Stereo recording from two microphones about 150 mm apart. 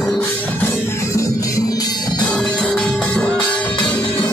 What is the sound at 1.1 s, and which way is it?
Music, 20° left (ahead or behind).